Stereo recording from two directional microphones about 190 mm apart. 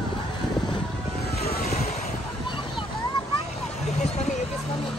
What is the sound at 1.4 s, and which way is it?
Vehicle, 55° left (ahead or behind).